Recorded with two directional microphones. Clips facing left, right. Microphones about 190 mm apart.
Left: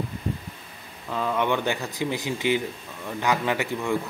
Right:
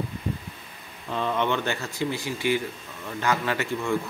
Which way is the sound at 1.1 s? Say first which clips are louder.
Left 1 dB; 5° left (ahead or behind).